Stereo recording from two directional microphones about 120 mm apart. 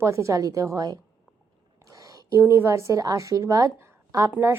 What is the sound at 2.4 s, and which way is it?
A woman's voice, 20° right (ahead or behind).